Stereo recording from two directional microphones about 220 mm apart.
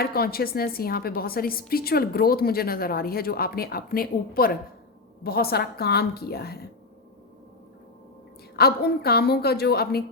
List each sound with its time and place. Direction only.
0.0 s a woman's voice: 45° left (ahead or behind)
8.5 s a woman's voice: 45° left (ahead or behind)